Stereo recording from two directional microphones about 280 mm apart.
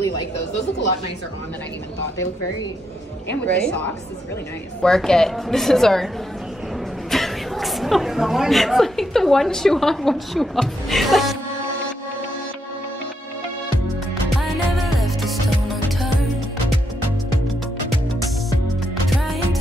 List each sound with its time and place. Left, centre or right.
3.3 s a woman's voice: centre
7.1 s speech: centre
15.0 s music: centre
19.0 s music: centre